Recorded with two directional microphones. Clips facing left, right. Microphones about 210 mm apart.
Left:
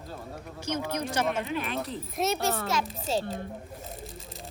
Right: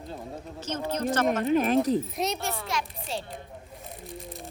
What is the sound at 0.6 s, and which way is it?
Speech, 10° left (ahead or behind).